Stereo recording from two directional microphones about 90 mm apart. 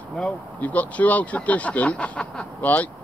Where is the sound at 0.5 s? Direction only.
15° left (ahead or behind).